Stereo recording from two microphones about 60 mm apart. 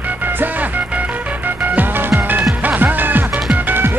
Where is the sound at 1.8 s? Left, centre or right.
Right.